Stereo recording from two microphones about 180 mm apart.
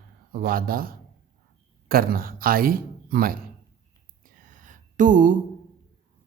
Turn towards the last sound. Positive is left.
turn(degrees=-45)  # may be behind; listen again after turning